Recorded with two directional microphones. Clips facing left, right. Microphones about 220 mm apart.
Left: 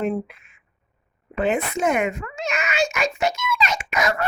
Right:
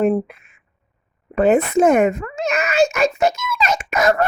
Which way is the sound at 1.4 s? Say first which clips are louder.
Right 8 dB; 40° right (ahead or behind).